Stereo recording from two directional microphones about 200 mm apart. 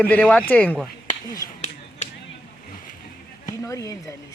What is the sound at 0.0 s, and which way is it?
Speech, 10° left (ahead or behind).